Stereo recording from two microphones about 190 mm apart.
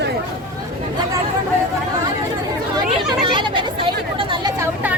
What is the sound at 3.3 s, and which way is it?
Chatter, 25° right (ahead or behind).